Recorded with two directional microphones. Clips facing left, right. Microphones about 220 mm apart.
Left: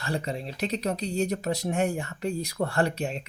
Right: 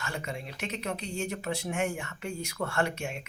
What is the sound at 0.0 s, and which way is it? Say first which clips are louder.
Speech: left 6 dB; 35° left (ahead or behind).